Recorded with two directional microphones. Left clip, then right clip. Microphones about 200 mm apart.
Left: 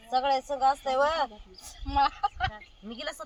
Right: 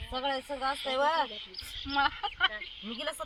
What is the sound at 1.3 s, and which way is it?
Speech, 50° left (ahead or behind).